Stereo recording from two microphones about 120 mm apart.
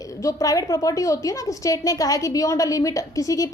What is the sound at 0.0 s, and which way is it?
A woman's voice, 25° left (ahead or behind).